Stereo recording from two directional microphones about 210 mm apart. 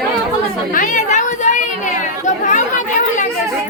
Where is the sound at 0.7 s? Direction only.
40° left (ahead or behind).